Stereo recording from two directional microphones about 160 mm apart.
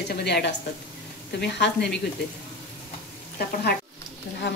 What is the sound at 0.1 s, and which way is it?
Speech, 90° left.